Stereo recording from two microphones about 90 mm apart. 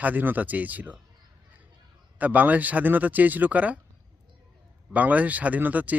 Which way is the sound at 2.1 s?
20° right (ahead or behind).